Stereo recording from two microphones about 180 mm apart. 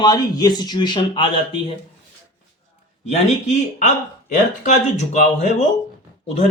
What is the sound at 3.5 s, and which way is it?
Speech, 40° left (ahead or behind).